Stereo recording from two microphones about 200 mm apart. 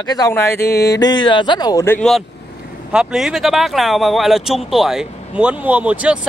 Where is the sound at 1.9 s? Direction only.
Centre (ahead or behind).